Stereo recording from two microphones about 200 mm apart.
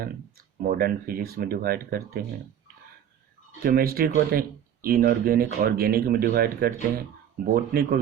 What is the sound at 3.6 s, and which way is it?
Speech, 50° right (ahead or behind).